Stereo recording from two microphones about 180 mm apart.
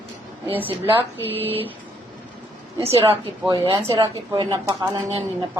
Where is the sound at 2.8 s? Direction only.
35° right (ahead or behind).